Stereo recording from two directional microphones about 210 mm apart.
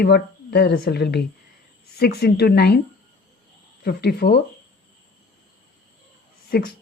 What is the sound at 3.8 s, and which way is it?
Speech, 50° left (ahead or behind).